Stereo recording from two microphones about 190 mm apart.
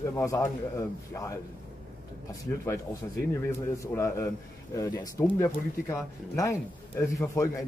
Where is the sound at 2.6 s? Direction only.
15° left (ahead or behind).